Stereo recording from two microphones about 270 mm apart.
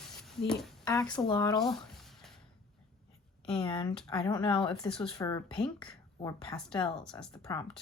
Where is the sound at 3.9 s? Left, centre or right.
Centre.